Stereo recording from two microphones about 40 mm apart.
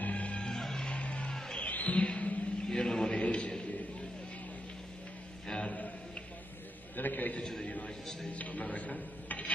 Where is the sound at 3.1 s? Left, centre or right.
Left.